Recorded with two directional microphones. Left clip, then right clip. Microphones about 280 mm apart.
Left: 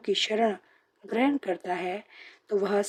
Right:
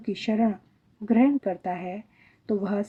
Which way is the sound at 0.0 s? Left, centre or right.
Left.